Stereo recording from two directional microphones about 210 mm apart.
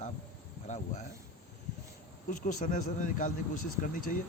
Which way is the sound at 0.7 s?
35° left (ahead or behind).